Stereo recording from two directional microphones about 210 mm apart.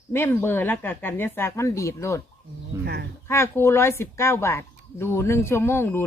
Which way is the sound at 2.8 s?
50° right (ahead or behind).